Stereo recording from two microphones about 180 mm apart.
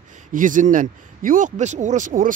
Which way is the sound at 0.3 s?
45° right (ahead or behind).